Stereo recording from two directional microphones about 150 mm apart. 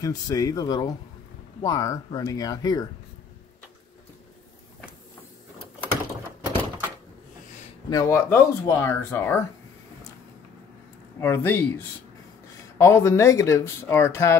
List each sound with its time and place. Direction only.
0.0 s speech: 25° left (ahead or behind)
7.9 s speech: 20° left (ahead or behind)
11.1 s speech: 15° left (ahead or behind)